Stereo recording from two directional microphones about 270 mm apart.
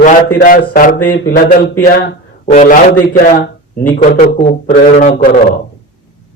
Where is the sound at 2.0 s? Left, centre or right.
Left.